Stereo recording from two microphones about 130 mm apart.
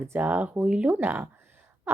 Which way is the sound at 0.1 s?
15° right (ahead or behind).